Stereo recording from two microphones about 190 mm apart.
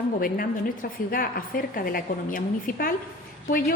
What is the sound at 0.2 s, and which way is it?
A woman's voice, 50° left (ahead or behind).